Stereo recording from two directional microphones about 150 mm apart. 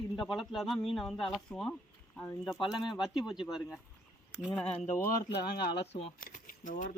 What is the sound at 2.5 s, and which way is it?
Speech, 30° left (ahead or behind).